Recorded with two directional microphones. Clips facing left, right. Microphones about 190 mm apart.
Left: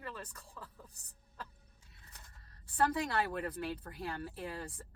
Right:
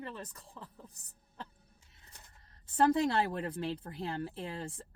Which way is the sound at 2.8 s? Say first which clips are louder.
Right 5 dB; 25° right (ahead or behind).